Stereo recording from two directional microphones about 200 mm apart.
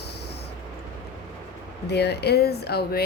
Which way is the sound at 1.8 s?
55° left (ahead or behind).